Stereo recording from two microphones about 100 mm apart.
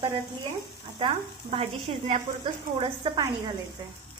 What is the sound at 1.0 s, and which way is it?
Speech, 90° right.